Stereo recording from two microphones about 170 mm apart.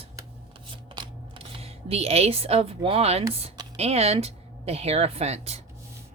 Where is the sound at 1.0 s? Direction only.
35° right (ahead or behind).